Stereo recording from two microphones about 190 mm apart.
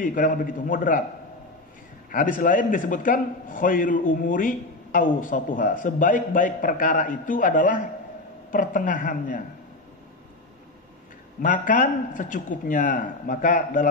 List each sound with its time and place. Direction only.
0.0 s a man's voice: 45° left (ahead or behind)
2.0 s a man's voice: 45° left (ahead or behind)
11.4 s a man's voice: 45° left (ahead or behind)